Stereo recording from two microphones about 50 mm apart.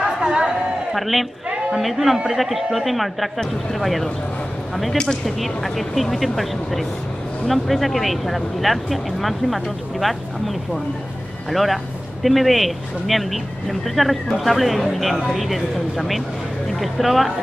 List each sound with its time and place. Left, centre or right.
0.0 s chatter: centre
0.9 s speech: centre
5.2 s speech: centre